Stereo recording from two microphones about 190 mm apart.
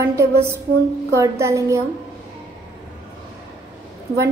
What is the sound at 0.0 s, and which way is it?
Speech, 15° right (ahead or behind).